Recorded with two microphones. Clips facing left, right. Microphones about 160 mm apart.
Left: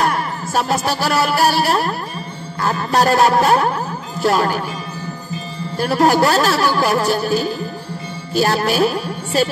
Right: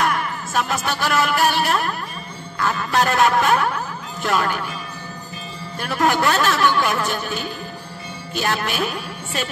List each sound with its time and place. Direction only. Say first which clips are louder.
0.0 s music: left 3 dB; 35° left (ahead or behind)
2.6 s a man's voice: left 4 dB; 35° left (ahead or behind)
5.8 s speech: left 6 dB; 35° left (ahead or behind)